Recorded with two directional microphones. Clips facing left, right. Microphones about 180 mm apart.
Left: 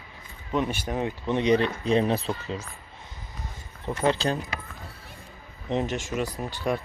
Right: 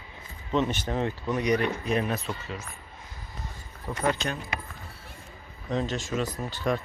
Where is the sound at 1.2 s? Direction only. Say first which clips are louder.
Left 4 dB; 25° left (ahead or behind).